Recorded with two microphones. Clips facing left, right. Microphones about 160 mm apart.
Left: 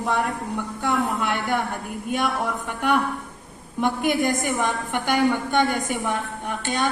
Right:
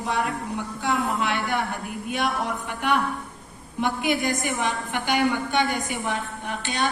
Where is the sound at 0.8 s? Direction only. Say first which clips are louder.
Left 1 dB; 50° left (ahead or behind).